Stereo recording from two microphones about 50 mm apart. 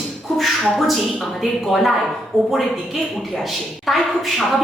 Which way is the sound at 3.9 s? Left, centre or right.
Centre.